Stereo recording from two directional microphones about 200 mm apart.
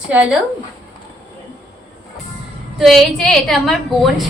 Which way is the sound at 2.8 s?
Centre (ahead or behind).